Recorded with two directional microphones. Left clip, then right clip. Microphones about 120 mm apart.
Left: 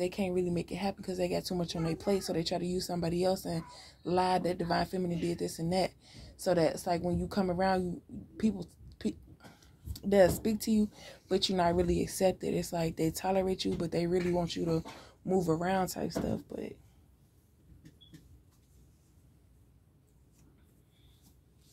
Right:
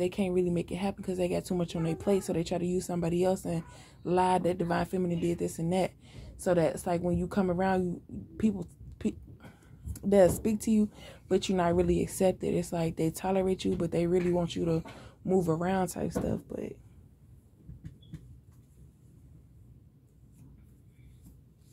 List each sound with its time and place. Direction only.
0.0 s speech: 25° right (ahead or behind)
8.9 s a sound: 20° right (ahead or behind)
9.9 s speech: 25° right (ahead or behind)